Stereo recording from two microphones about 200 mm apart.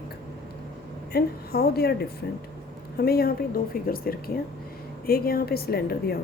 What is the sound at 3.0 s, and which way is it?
A woman's voice, 50° left (ahead or behind).